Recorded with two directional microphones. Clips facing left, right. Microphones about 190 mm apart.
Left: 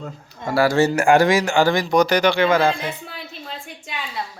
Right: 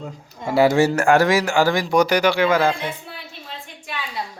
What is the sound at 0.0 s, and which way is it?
Speech, 10° right (ahead or behind).